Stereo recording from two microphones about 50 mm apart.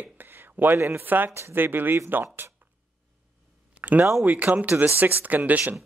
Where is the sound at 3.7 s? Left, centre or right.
Right.